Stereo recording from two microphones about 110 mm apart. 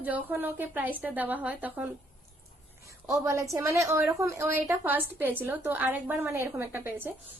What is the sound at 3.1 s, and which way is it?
A woman's voice, 30° right (ahead or behind).